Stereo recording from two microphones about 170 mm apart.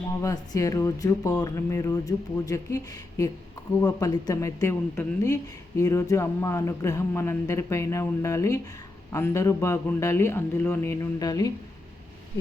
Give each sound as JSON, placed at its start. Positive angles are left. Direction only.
{"t": 0.2, "sound": "speech", "side_deg": 20}